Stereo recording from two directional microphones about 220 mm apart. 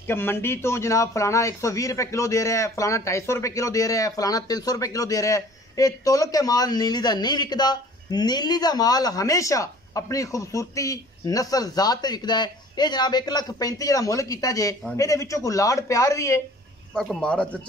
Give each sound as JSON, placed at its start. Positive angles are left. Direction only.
{"t": 0.0, "sound": "a man's voice", "side_deg": 10}
{"t": 16.9, "sound": "speech", "side_deg": 0}